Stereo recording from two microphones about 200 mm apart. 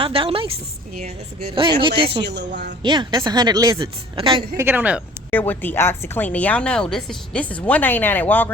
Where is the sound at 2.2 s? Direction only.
60° right (ahead or behind).